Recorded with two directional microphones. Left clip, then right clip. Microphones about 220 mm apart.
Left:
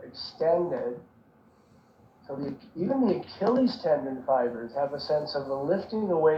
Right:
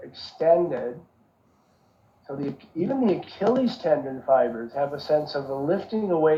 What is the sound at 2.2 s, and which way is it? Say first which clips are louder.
Speech: right 3 dB; 35° right (ahead or behind).